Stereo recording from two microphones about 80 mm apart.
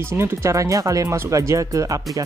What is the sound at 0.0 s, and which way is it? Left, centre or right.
Speech, right.